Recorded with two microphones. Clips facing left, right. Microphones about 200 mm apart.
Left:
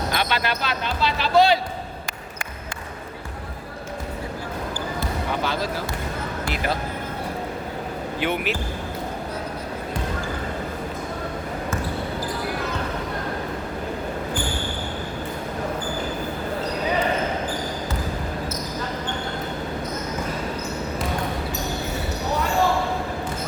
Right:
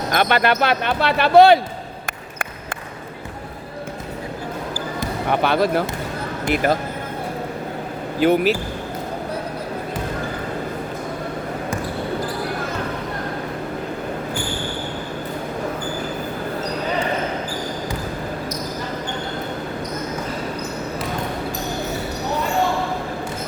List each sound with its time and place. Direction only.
0.1 s speech: 55° right (ahead or behind)
5.3 s speech: 60° right (ahead or behind)
6.5 s speech: 45° right (ahead or behind)
8.2 s speech: 40° right (ahead or behind)